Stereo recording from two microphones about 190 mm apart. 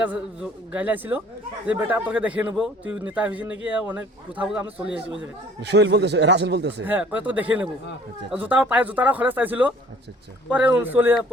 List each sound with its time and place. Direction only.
0.0 s speech: 5° right (ahead or behind)
5.6 s speech: 65° right (ahead or behind)
6.8 s speech: 10° right (ahead or behind)